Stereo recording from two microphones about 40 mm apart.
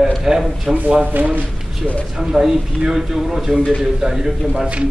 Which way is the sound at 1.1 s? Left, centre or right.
Right.